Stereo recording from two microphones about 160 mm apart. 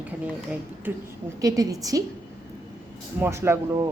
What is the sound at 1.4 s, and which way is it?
Speech, 20° right (ahead or behind).